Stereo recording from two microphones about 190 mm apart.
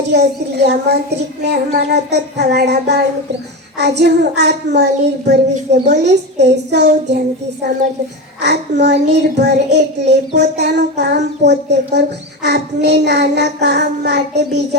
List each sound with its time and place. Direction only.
0.1 s child singing: 60° right (ahead or behind)
8.4 s child singing: 65° right (ahead or behind)